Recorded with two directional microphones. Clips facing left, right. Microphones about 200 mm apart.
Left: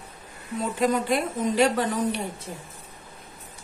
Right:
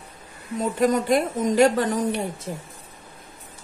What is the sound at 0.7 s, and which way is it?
A woman's voice, 45° right (ahead or behind).